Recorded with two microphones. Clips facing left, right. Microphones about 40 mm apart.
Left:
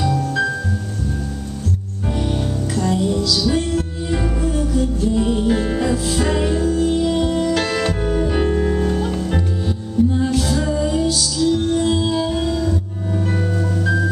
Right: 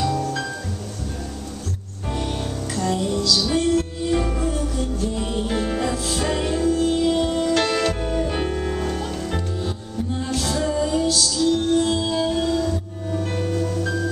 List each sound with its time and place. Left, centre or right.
0.0 s music: centre
2.1 s music: centre
3.3 s music: centre
13.5 s music: centre